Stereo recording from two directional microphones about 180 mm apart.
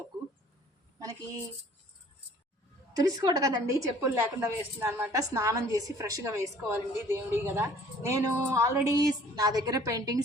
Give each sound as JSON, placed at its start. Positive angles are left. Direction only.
{"t": 2.9, "sound": "a woman's voice", "side_deg": -20}